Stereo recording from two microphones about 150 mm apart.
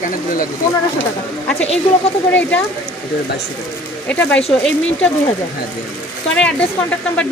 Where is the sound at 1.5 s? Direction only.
5° left (ahead or behind).